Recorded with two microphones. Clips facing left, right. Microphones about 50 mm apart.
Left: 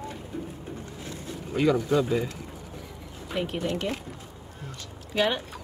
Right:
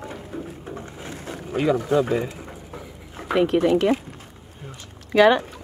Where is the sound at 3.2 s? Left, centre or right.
Right.